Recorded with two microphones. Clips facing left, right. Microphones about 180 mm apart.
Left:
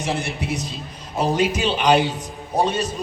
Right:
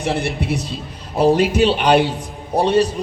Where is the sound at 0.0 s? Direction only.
60° right (ahead or behind).